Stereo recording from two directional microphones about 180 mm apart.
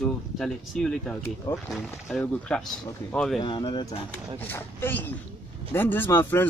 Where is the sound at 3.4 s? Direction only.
25° left (ahead or behind).